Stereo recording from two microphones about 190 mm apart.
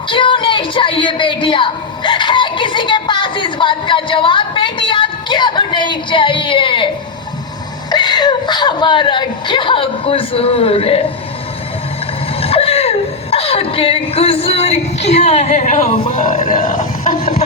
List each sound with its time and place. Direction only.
0.1 s music: 25° left (ahead or behind)
7.9 s speech: 20° left (ahead or behind)
12.4 s speech: 30° left (ahead or behind)
16.6 s speech: 45° left (ahead or behind)